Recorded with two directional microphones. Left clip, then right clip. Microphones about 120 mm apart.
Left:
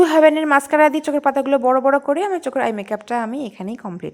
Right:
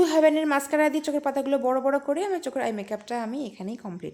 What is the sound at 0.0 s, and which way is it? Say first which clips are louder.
A woman's voice: left 7 dB; 30° left (ahead or behind).